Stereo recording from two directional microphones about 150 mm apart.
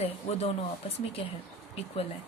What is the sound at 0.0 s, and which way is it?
Speech, 45° left (ahead or behind).